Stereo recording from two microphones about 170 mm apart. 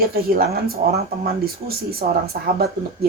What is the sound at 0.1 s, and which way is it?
Speech, 65° right (ahead or behind).